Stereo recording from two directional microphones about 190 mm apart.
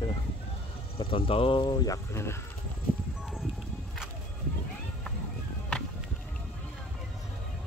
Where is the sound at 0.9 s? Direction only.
30° left (ahead or behind).